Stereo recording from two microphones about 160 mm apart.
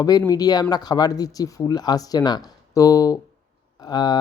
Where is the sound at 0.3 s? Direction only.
25° left (ahead or behind).